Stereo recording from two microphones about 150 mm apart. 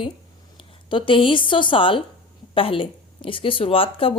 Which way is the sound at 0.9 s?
35° left (ahead or behind).